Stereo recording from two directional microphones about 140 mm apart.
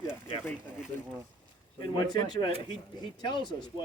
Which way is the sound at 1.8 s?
30° left (ahead or behind).